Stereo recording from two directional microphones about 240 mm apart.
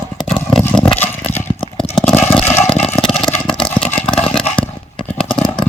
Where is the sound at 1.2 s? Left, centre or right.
Left.